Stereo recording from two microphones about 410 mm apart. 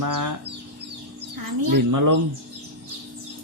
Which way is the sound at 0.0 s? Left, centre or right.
Right.